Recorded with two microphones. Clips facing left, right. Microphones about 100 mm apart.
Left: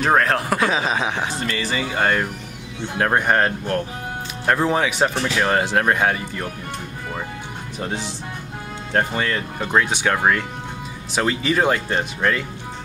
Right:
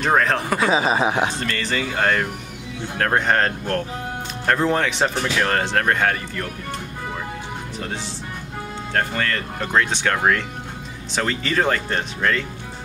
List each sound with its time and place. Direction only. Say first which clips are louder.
0.0 s speech: left 1 dB; 5° left (ahead or behind)
8.9 s speech: left 2 dB; 15° left (ahead or behind)